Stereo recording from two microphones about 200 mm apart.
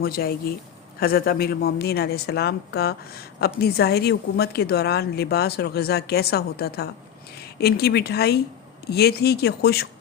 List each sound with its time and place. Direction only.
0.0 s a woman's voice: 50° left (ahead or behind)